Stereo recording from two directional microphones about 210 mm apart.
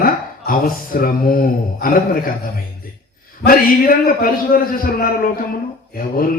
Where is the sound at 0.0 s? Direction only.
45° left (ahead or behind).